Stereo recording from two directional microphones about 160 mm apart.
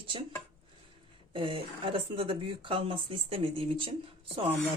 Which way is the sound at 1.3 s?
35° right (ahead or behind).